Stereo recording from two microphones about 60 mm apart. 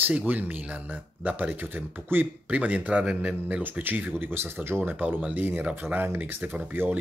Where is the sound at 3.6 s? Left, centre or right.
Right.